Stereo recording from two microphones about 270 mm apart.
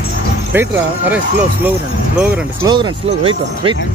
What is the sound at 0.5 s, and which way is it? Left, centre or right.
Speech, centre.